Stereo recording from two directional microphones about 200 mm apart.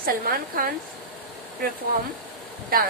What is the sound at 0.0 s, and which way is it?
Speech, 45° right (ahead or behind).